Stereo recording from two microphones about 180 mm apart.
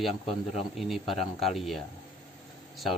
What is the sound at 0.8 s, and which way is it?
Speech, centre (ahead or behind).